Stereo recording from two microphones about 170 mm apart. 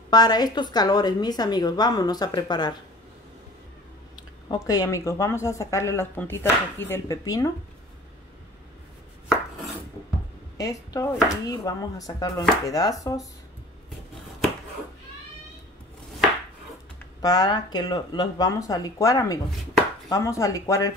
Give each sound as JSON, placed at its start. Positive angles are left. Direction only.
{"t": 0.1, "sound": "a woman's voice", "side_deg": 25}
{"t": 4.5, "sound": "a woman's voice", "side_deg": 20}
{"t": 10.6, "sound": "a woman's voice", "side_deg": 20}
{"t": 17.2, "sound": "a woman's voice", "side_deg": 25}